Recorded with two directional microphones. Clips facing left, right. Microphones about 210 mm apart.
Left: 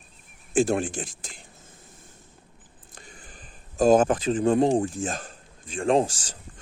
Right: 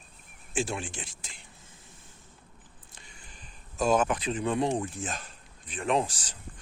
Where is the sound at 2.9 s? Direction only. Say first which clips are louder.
Left 8 dB; 50° left (ahead or behind).